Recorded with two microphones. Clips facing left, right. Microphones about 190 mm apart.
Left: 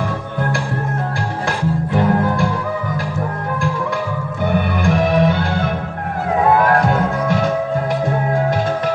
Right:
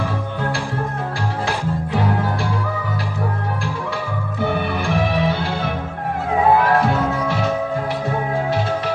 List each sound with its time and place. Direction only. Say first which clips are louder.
4.8 s music: left 5 dB; 50° left (ahead or behind)